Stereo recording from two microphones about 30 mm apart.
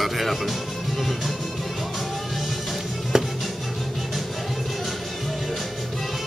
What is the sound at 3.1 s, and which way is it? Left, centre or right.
Music, centre.